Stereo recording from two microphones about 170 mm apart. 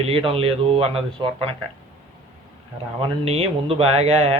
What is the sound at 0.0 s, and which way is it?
Speech, 35° right (ahead or behind).